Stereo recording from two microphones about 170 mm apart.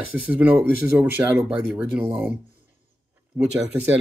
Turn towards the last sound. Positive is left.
turn(degrees=-10)  # may be behind; listen again after turning